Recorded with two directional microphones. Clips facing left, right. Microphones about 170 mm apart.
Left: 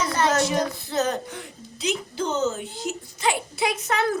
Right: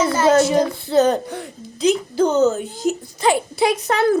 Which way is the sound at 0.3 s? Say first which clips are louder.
Right 11 dB; 30° right (ahead or behind).